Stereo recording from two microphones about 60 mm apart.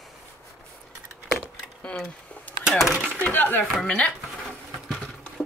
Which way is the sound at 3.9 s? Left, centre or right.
Left.